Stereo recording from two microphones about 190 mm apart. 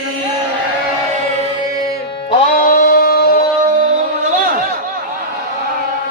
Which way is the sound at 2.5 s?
50° left (ahead or behind).